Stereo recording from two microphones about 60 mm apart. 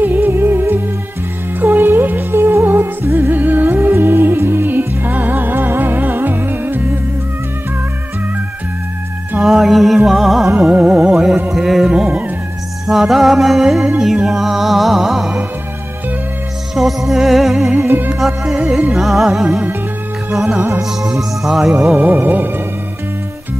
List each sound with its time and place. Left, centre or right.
0.0 s music: right
9.4 s music: centre
10.7 s music: right
11.0 s music: centre
16.7 s music: centre
17.8 s music: right
18.4 s music: centre
20.8 s music: centre
21.9 s music: right